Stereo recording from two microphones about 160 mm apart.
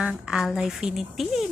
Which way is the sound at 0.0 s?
5° right (ahead or behind).